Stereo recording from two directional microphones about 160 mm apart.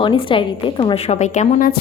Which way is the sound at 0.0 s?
35° left (ahead or behind).